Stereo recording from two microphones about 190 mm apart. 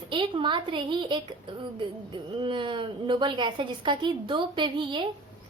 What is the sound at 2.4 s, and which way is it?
A child's voice, 25° right (ahead or behind).